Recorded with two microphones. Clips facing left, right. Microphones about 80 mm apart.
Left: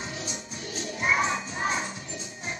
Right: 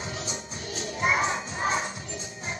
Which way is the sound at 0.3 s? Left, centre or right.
Right.